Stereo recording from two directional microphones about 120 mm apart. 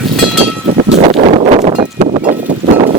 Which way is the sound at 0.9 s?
55° right (ahead or behind).